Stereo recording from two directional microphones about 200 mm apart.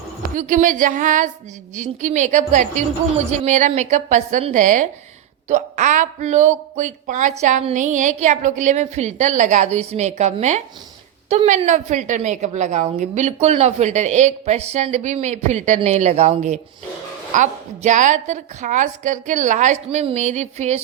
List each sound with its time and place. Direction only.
0.3 s a woman's voice: 40° right (ahead or behind)